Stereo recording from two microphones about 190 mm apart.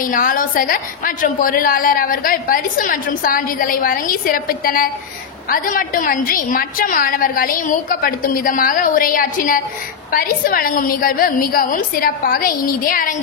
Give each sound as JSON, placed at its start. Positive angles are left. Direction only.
{"t": 0.0, "sound": "a woman's voice", "side_deg": 45}